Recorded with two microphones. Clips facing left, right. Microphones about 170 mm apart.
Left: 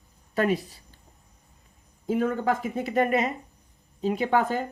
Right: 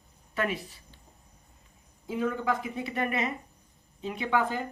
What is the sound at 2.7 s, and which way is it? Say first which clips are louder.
Speech: left 7 dB; 40° left (ahead or behind).